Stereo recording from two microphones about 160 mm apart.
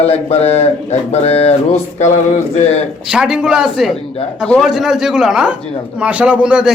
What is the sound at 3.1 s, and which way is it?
A man's voice, 5° right (ahead or behind).